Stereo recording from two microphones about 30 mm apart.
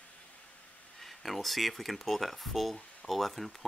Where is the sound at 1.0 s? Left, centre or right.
Centre.